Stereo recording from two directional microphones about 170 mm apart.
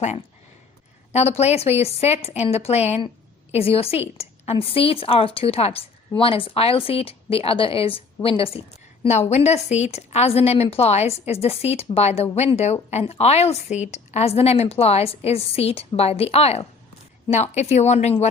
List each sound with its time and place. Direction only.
1.1 s a woman's voice: 40° left (ahead or behind)
4.0 s a sound: 40° left (ahead or behind)
4.5 s a woman's voice: 35° left (ahead or behind)